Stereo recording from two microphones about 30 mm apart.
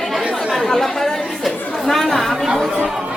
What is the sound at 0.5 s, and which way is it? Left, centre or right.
Chatter, centre.